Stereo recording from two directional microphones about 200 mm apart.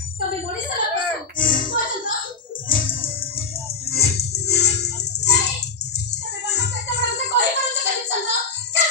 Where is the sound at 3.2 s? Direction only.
30° left (ahead or behind).